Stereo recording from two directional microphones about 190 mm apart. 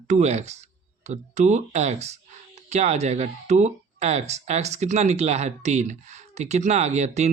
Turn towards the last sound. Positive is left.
turn(degrees=-35)  # may be behind; listen again after turning